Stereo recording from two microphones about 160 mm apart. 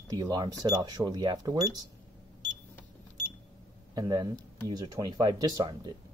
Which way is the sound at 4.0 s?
25° right (ahead or behind).